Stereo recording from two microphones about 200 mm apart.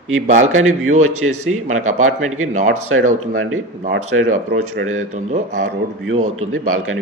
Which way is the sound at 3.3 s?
90° right.